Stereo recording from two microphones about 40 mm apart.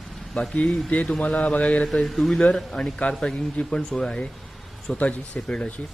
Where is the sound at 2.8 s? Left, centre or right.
Left.